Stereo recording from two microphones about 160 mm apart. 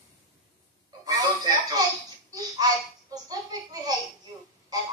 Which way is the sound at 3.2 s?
25° right (ahead or behind).